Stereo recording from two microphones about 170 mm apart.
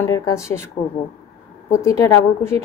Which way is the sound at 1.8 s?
15° left (ahead or behind).